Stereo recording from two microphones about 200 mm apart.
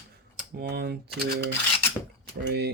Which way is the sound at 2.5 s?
55° right (ahead or behind).